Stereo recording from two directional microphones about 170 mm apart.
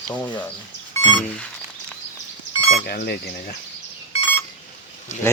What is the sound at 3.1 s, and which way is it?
Speech, 60° left (ahead or behind).